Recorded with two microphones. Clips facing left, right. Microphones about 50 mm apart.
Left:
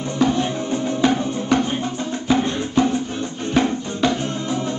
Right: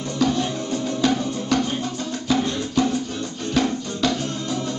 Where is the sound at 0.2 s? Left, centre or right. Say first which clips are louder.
Left 2 dB; left.